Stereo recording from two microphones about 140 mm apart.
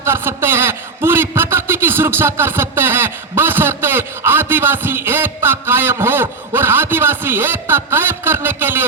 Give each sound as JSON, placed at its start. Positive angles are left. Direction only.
{"t": 0.0, "sound": "a man's voice", "side_deg": -15}